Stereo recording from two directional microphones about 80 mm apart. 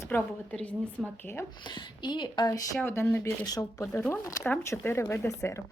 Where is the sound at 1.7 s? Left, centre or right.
Left.